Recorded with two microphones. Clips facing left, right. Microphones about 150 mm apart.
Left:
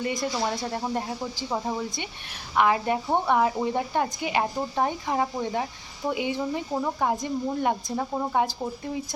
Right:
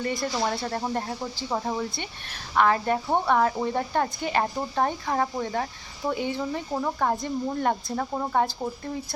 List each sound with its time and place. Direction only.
0.0 s a woman's voice: 15° left (ahead or behind)